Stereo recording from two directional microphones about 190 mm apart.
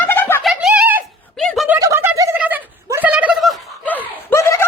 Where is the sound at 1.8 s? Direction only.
15° right (ahead or behind).